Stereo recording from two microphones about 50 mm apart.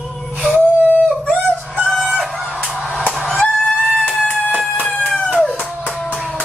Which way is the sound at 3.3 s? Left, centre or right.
Centre.